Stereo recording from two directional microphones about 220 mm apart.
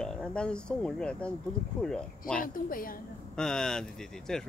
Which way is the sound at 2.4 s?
40° left (ahead or behind).